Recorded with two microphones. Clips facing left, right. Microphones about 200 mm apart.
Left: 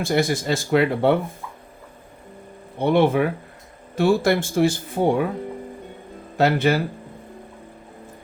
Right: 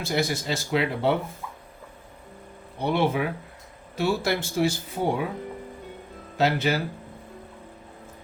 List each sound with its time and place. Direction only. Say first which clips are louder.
0.0 s speech: left 5 dB; 50° left (ahead or behind)
2.7 s speech: left 6 dB; 50° left (ahead or behind)
6.3 s speech: left 5 dB; 50° left (ahead or behind)